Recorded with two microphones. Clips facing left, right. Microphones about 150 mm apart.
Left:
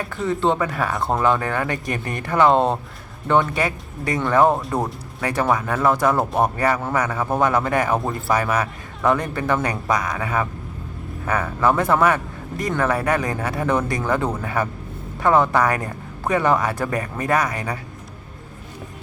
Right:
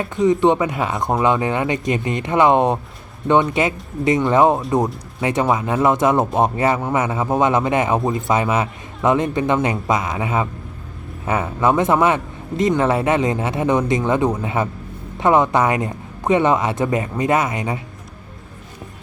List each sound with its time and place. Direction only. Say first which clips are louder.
0.0 s speech: right 6 dB; 20° right (ahead or behind)